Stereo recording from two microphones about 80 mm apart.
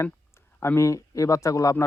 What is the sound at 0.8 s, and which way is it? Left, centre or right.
A man's voice, left.